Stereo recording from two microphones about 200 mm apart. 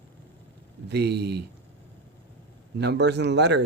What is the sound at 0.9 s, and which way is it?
Speech, 55° right (ahead or behind).